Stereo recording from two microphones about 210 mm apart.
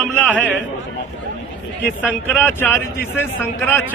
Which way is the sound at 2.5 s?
10° left (ahead or behind).